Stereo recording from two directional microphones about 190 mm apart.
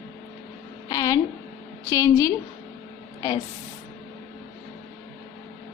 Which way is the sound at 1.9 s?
15° left (ahead or behind).